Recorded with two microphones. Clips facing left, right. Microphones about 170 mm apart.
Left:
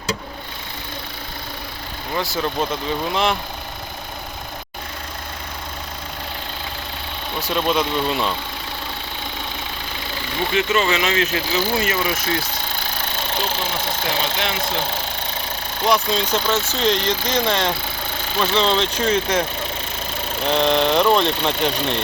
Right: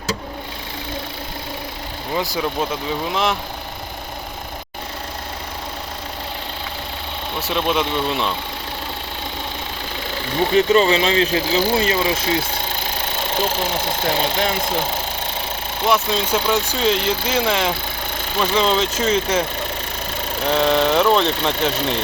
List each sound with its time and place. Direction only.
2.1 s speech: 15° right (ahead or behind)
7.3 s speech: 5° right (ahead or behind)
10.5 s speech: 35° right (ahead or behind)
14.0 s speech: 40° right (ahead or behind)
15.8 s speech: 5° right (ahead or behind)